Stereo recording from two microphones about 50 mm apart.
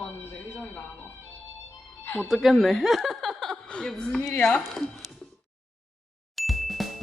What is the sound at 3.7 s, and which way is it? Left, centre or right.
A woman's voice, centre.